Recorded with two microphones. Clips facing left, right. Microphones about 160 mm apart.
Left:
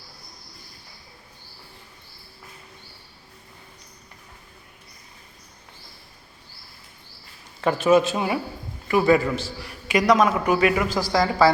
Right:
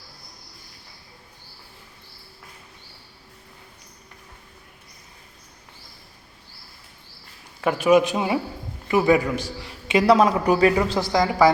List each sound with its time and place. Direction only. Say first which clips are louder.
7.6 s a man's voice: right 1 dB; 10° right (ahead or behind)